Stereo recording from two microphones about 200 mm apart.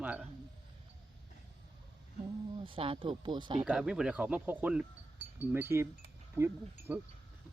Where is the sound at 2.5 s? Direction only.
25° right (ahead or behind).